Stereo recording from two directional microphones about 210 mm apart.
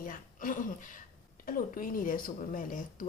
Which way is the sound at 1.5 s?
40° left (ahead or behind).